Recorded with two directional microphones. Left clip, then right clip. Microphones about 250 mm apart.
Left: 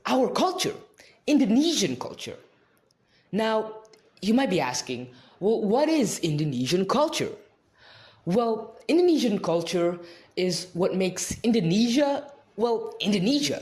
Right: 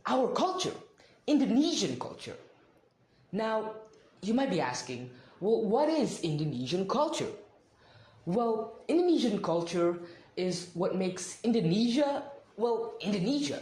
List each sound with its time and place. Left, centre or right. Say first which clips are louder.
0.0 s a sound: left 5 dB; left
1.2 s speech: left 5 dB; left
3.3 s a man's voice: left 6 dB; left
8.3 s a man's voice: left 5 dB; left